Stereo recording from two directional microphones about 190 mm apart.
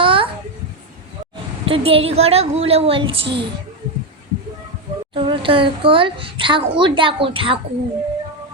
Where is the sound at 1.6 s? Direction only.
30° right (ahead or behind).